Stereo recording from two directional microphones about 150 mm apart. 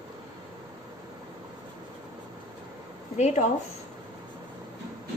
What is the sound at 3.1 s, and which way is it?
Speech, 50° left (ahead or behind).